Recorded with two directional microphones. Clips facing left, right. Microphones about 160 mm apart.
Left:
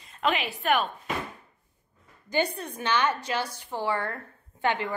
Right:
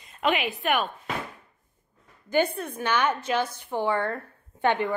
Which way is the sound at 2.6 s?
10° right (ahead or behind).